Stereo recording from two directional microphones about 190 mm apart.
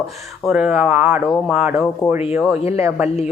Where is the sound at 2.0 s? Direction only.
20° left (ahead or behind).